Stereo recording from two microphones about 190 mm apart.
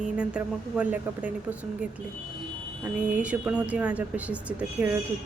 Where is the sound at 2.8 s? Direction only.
5° right (ahead or behind).